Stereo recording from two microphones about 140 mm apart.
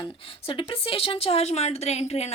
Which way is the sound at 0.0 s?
40° left (ahead or behind).